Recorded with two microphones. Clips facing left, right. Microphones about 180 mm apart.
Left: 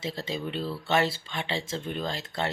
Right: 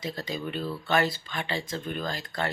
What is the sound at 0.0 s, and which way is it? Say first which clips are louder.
Speech: left 1 dB; 25° left (ahead or behind).